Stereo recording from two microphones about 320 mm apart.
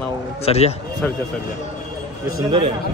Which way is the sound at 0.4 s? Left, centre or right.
Centre.